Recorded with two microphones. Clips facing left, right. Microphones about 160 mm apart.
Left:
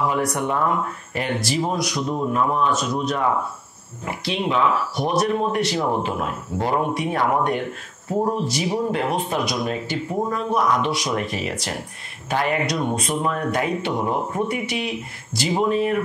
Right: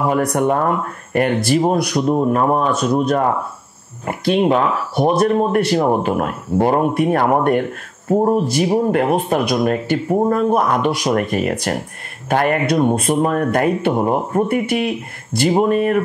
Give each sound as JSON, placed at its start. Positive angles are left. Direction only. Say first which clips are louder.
{"t": 0.1, "sound": "speech", "louder": "right 6 dB", "side_deg": -55}